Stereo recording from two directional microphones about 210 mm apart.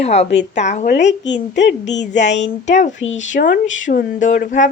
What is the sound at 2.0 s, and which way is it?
A woman's voice, 35° left (ahead or behind).